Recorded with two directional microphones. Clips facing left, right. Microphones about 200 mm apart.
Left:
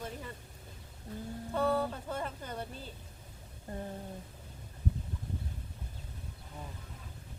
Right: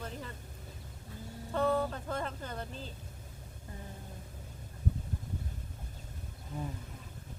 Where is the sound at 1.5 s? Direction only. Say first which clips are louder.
Right 1 dB; 10° left (ahead or behind).